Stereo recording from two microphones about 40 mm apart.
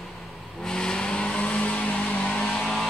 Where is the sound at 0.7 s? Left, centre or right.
Centre.